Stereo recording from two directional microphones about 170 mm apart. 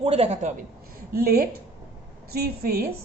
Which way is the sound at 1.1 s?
60° right (ahead or behind).